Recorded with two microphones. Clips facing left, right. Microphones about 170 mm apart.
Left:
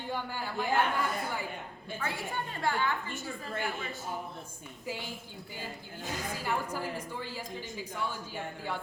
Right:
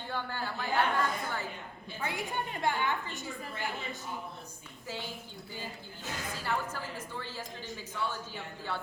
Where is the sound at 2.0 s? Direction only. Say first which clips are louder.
Right 1 dB; 20° right (ahead or behind).